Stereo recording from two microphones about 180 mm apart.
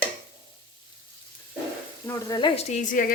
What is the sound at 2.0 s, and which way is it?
Speech, 20° left (ahead or behind).